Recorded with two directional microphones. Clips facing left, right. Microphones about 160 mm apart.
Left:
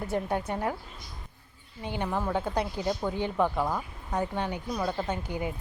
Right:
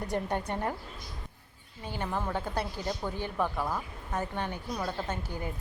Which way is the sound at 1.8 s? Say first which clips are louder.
Left 3 dB; 15° left (ahead or behind).